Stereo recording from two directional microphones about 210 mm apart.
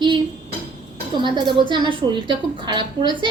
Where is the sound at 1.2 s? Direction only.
20° right (ahead or behind).